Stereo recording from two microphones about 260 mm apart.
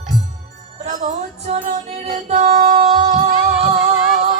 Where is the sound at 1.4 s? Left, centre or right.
Right.